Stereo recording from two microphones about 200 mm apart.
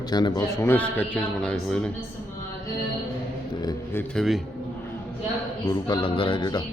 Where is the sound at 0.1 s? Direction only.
20° left (ahead or behind); by 1.9 s 5° left (ahead or behind).